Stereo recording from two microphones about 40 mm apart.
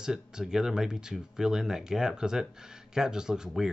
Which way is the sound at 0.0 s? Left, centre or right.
Centre.